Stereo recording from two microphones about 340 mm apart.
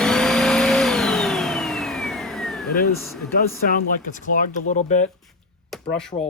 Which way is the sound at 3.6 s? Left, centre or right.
Left.